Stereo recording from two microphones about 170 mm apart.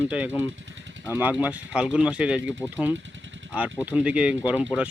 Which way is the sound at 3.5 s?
10° right (ahead or behind).